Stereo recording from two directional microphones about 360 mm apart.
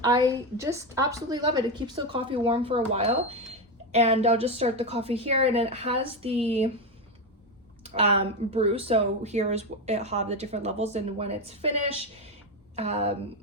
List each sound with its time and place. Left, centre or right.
0.0 s speech: centre
7.9 s speech: centre
12.7 s speech: centre